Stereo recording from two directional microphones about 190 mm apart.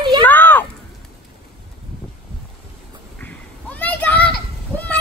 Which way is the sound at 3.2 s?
10° left (ahead or behind).